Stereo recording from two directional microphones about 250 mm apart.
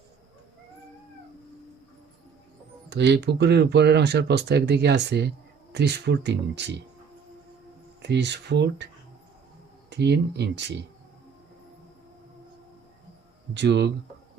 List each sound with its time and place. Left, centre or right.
2.9 s speech: right
8.0 s speech: right
9.9 s speech: right
13.5 s speech: right